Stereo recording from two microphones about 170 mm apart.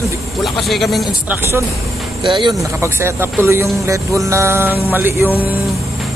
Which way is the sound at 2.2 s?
30° right (ahead or behind).